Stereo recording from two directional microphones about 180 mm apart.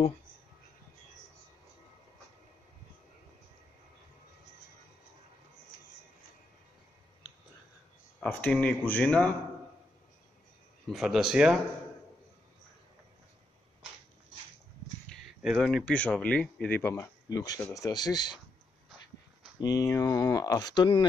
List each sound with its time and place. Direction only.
8.2 s speech: 5° left (ahead or behind)
10.9 s speech: centre (ahead or behind)
15.4 s speech: centre (ahead or behind); by 18.4 s 25° left (ahead or behind)
19.6 s speech: 20° left (ahead or behind)